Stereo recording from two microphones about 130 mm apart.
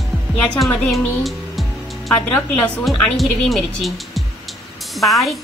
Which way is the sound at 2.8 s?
Centre (ahead or behind).